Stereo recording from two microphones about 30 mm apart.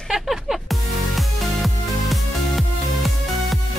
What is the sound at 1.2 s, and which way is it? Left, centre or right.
Music, centre.